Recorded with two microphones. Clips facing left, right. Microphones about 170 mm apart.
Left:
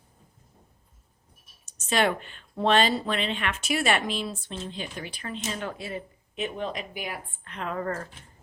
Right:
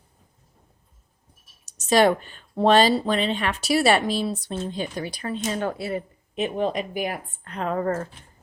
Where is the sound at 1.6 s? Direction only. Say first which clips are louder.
Right 7 dB; 40° right (ahead or behind).